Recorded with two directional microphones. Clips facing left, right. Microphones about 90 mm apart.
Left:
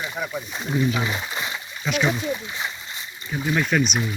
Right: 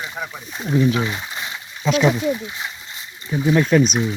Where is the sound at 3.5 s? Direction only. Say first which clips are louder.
Right 6 dB; 25° right (ahead or behind).